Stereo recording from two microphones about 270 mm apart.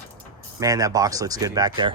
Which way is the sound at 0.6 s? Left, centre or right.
Centre.